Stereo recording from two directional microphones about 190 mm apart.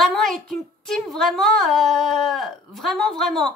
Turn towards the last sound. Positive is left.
turn(degrees=0)  # may be behind; listen again after turning